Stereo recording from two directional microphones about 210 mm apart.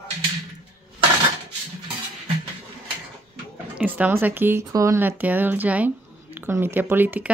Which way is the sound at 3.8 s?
10° right (ahead or behind).